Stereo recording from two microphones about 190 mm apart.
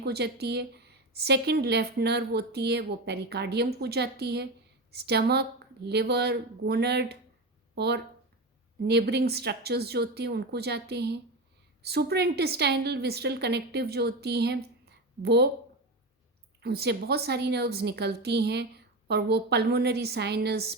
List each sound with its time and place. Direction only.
0.0 s a woman's voice: 60° right (ahead or behind)
16.6 s a woman's voice: 60° right (ahead or behind)